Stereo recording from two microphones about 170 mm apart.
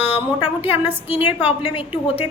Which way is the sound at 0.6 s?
10° right (ahead or behind).